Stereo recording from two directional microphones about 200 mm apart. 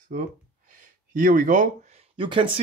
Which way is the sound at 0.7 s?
40° right (ahead or behind).